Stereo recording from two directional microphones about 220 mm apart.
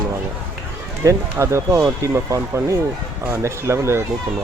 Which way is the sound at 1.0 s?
15° right (ahead or behind).